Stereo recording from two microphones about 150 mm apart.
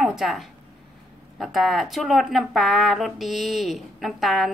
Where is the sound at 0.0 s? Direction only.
Centre (ahead or behind).